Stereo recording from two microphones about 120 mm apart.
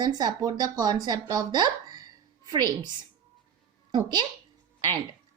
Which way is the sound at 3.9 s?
35° right (ahead or behind).